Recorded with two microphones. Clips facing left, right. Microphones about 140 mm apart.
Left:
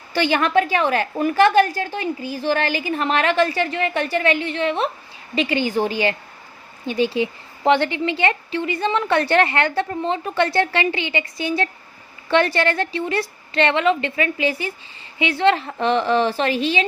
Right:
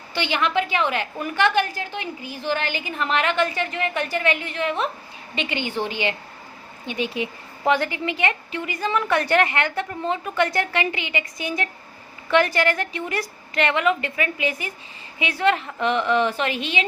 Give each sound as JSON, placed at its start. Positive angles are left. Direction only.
{"t": 0.1, "sound": "a woman's voice", "side_deg": 45}